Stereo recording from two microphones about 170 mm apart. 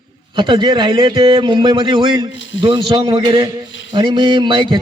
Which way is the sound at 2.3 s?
90° left.